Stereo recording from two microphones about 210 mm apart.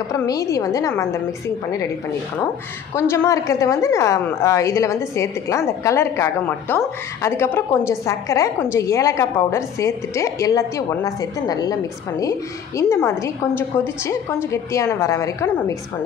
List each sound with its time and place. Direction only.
0.1 s a woman's voice: 15° left (ahead or behind)
2.9 s a woman's voice: 15° left (ahead or behind)